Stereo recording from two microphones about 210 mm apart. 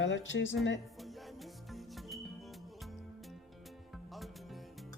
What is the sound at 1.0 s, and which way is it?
Music, centre (ahead or behind).